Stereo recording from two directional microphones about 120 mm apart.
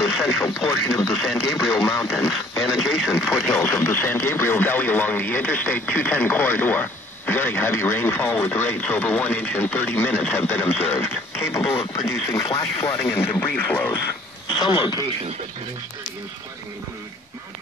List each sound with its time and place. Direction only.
0.9 s speech: 5° left (ahead or behind); by 12.9 s 30° left (ahead or behind)
12.9 s speech: 15° left (ahead or behind)
14.6 s speech: 40° left (ahead or behind)